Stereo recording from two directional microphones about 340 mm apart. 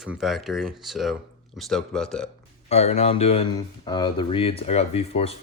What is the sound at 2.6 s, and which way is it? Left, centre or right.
Speech, centre.